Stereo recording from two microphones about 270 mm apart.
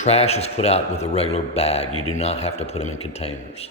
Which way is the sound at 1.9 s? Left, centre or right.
Left.